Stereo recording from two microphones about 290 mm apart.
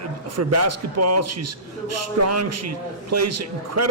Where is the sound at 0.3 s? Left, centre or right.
Right.